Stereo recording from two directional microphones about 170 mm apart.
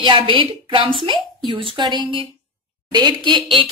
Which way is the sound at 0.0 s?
30° right (ahead or behind).